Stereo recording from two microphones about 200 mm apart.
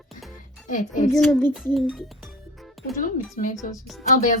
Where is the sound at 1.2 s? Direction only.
5° left (ahead or behind).